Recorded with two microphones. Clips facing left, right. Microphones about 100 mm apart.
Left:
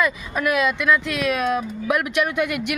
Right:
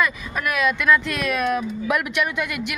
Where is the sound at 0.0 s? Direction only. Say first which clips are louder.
Left 2 dB; 25° left (ahead or behind).